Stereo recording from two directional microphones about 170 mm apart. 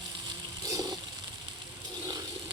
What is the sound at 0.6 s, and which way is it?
Water, 20° right (ahead or behind).